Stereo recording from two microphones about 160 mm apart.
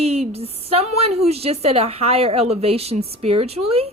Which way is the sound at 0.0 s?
40° right (ahead or behind).